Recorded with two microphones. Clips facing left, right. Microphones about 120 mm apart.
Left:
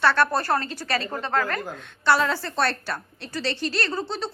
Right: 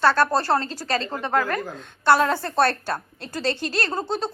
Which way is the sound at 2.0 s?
50° right (ahead or behind).